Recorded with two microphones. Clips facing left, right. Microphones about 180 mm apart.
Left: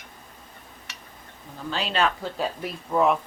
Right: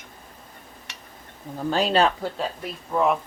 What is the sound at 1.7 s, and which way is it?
Speech, 40° right (ahead or behind).